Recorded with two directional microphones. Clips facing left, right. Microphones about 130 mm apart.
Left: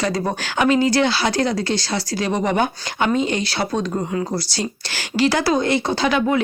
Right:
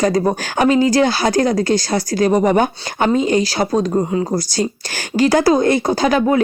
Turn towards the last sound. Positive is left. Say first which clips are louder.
# right 4 dB
turn(degrees=-45)  # may be behind; listen again after turning